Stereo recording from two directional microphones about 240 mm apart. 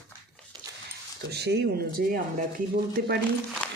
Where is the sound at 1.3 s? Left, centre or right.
Right.